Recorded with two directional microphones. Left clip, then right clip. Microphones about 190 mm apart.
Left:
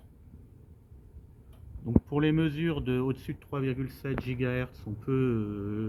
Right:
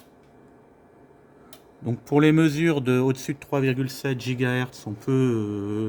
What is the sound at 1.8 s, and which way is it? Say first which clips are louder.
Speech: right 8 dB; 70° right (ahead or behind).